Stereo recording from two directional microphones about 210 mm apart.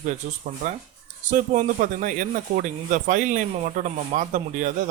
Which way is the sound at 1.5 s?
40° right (ahead or behind).